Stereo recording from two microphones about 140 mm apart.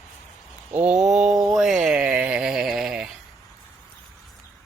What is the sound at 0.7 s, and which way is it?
Mantra, 10° right (ahead or behind).